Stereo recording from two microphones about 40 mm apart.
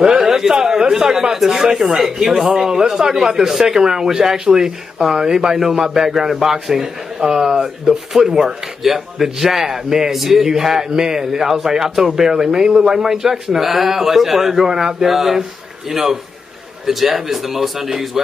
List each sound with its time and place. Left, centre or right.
0.0 s a sound: centre
0.4 s a man's voice: centre
2.7 s a man's voice: centre